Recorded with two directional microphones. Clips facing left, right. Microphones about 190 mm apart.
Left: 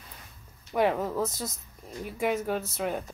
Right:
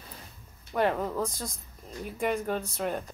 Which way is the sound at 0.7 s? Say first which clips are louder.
Left 1 dB; 10° left (ahead or behind).